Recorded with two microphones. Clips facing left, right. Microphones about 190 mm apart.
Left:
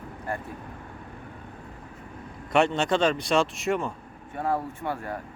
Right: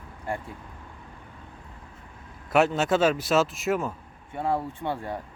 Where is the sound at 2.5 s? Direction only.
5° right (ahead or behind).